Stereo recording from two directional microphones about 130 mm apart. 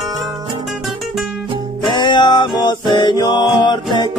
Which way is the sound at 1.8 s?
35° left (ahead or behind).